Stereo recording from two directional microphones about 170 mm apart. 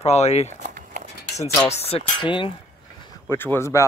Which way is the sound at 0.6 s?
50° right (ahead or behind).